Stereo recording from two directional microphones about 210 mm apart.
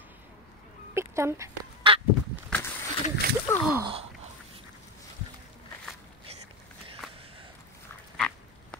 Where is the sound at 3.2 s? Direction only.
45° right (ahead or behind).